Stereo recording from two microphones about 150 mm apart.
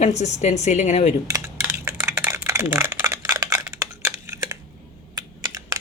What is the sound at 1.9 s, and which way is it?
Typing, 20° right (ahead or behind).